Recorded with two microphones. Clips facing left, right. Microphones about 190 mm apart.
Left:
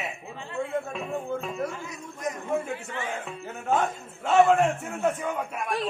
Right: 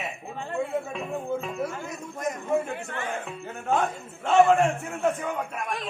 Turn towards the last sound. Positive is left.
turn(degrees=5)  # may be behind; listen again after turning